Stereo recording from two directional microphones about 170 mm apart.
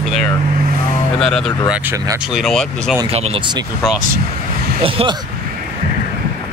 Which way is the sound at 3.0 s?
35° right (ahead or behind).